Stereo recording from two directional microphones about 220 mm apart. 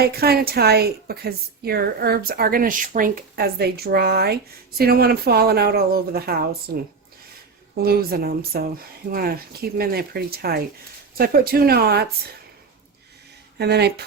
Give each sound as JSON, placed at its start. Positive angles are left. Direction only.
{"t": 0.0, "sound": "a woman's voice", "side_deg": -45}
{"t": 7.8, "sound": "a woman's voice", "side_deg": -45}
{"t": 13.6, "sound": "a woman's voice", "side_deg": -50}